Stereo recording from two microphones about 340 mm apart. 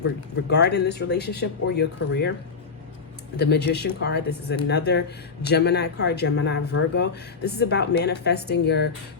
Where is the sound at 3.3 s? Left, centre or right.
Left.